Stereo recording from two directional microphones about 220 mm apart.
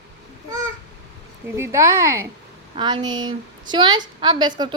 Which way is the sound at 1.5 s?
10° right (ahead or behind).